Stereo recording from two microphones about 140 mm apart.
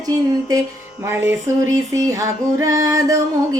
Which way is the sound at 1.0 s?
15° right (ahead or behind).